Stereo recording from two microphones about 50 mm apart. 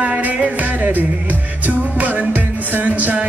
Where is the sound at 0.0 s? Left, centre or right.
Right.